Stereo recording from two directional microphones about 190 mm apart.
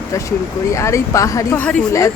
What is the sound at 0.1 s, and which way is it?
A woman's voice, 15° left (ahead or behind).